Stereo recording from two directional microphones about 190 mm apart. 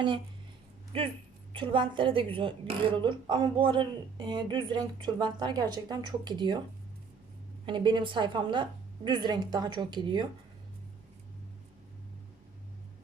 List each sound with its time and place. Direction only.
0.9 s a woman's voice: 30° right (ahead or behind)
7.6 s a woman's voice: 25° right (ahead or behind)